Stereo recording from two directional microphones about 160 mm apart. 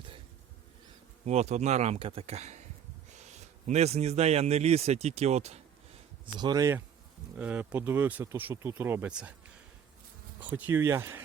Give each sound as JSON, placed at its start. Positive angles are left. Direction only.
{"t": 1.2, "sound": "a man's voice", "side_deg": -45}
{"t": 6.2, "sound": "speech", "side_deg": -25}
{"t": 10.5, "sound": "speech", "side_deg": -15}